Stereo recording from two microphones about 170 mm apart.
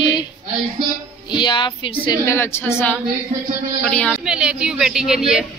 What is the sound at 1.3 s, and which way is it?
Speech, 25° left (ahead or behind).